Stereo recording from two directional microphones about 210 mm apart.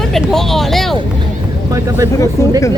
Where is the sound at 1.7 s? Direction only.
15° right (ahead or behind).